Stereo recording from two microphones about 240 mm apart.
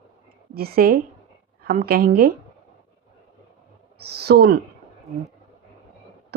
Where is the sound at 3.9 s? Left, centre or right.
Right.